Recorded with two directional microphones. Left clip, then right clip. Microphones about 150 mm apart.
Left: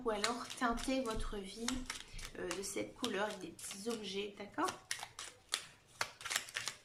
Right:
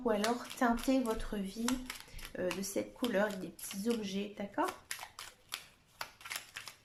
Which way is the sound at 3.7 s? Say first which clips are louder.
Right 6 dB; 5° right (ahead or behind).